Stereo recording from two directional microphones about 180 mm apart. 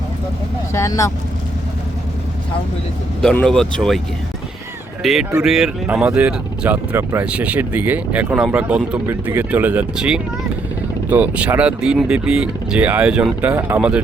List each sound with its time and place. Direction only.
0.7 s speech: 15° left (ahead or behind)
3.2 s speech: 5° left (ahead or behind)
5.0 s speech: centre (ahead or behind)